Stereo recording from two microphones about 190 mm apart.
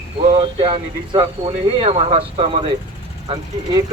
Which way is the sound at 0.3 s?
25° right (ahead or behind).